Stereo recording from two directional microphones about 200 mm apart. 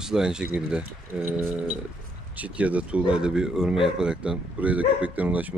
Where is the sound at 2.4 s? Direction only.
5° right (ahead or behind).